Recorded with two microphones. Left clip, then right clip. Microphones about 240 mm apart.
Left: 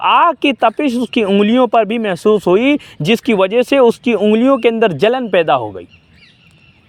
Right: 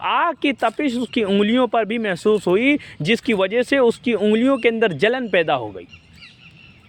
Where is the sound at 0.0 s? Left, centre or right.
Left.